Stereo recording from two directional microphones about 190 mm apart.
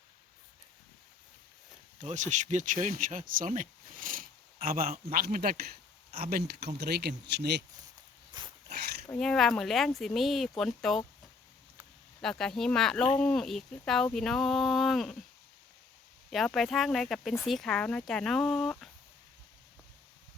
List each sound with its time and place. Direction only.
2.0 s speech: 40° right (ahead or behind); by 7.6 s 60° right (ahead or behind)
9.0 s speech: 5° left (ahead or behind)
12.2 s speech: 5° left (ahead or behind)
16.3 s speech: centre (ahead or behind)